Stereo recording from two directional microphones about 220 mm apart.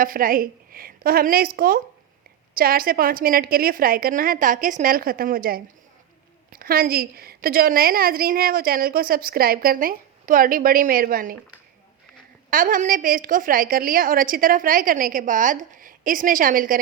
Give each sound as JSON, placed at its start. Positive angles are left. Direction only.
{"t": 0.0, "sound": "a woman's voice", "side_deg": -40}
{"t": 12.5, "sound": "a woman's voice", "side_deg": -40}